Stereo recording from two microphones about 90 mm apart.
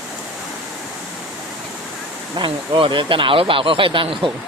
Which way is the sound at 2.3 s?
75° right (ahead or behind).